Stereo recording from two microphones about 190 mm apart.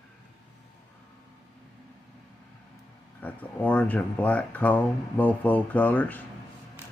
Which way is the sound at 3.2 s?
10° left (ahead or behind).